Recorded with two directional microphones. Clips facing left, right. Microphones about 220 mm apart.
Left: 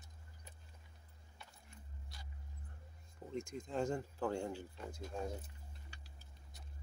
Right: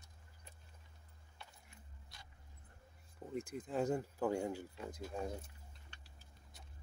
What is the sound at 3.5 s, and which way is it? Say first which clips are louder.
Speech: right 2 dB; 5° right (ahead or behind).